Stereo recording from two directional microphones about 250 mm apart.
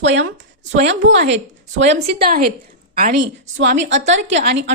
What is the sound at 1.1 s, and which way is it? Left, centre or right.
A woman's voice, right.